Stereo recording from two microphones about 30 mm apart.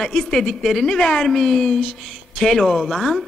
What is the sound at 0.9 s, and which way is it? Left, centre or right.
Speech, centre.